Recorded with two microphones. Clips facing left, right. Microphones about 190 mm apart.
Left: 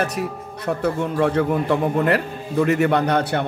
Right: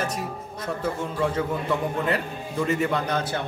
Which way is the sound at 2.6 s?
65° left (ahead or behind).